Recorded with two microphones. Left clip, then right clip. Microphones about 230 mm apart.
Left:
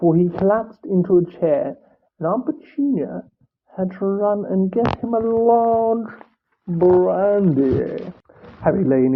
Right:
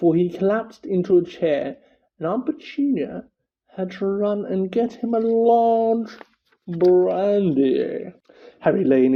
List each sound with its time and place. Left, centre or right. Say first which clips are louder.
0.0 s speech: left 2 dB; right